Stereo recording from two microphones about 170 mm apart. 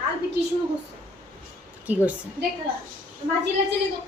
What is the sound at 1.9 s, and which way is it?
Speech, 10° right (ahead or behind).